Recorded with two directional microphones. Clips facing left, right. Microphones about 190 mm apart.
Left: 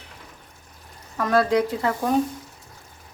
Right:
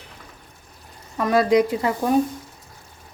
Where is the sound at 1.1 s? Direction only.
15° right (ahead or behind).